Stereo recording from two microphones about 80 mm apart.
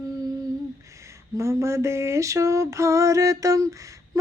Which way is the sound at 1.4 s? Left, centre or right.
Right.